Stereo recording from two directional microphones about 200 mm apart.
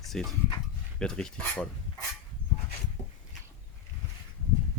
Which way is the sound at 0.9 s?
5° left (ahead or behind).